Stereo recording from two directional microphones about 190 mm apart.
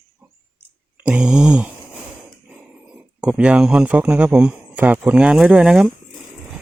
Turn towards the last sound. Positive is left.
turn(degrees=-5)  # may be behind; listen again after turning